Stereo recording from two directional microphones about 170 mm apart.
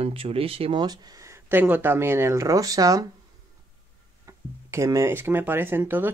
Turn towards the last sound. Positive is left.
turn(degrees=-10)  # may be behind; listen again after turning